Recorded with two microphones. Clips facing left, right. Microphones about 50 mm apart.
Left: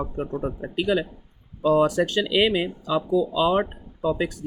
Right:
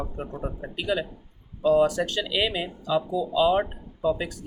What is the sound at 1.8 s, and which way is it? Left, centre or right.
Speech, left.